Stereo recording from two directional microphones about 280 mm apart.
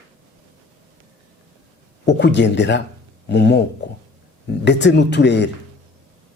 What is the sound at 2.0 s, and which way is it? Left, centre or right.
A man's voice, left.